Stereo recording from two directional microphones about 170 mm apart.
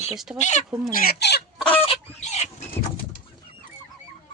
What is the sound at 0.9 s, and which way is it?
Speech, 60° left (ahead or behind).